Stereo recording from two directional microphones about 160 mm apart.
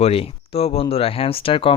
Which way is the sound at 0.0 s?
40° left (ahead or behind).